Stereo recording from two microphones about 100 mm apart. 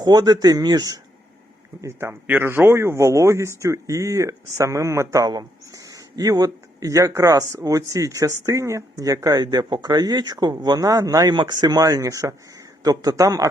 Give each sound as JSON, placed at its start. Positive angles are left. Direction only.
{"t": 0.0, "sound": "speech", "side_deg": -40}
{"t": 1.8, "sound": "speech", "side_deg": -30}